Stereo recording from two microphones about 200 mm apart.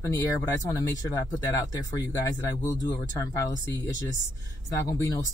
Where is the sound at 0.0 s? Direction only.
15° left (ahead or behind).